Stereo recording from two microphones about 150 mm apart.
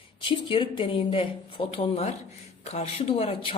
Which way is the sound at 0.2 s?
35° left (ahead or behind).